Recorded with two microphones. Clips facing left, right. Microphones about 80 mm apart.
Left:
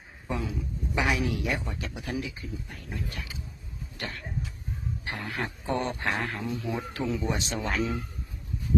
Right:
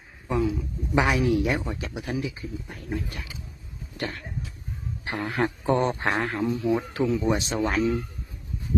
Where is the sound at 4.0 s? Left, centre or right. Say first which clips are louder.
Right 4 dB; right.